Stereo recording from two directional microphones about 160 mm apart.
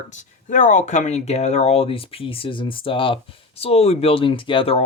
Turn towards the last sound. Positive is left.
turn(degrees=35)  # may be behind; listen again after turning